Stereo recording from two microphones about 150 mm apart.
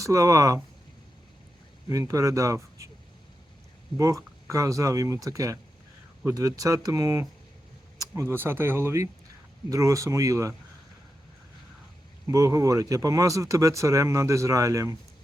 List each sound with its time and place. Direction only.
0.0 s speech: 20° right (ahead or behind)
1.9 s speech: 20° right (ahead or behind)
3.9 s speech: 20° right (ahead or behind)
12.3 s speech: 20° right (ahead or behind)